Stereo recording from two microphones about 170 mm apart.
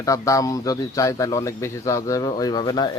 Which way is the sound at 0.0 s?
20° left (ahead or behind).